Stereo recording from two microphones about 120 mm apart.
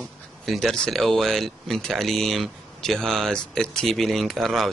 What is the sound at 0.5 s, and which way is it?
A man's voice, 5° left (ahead or behind).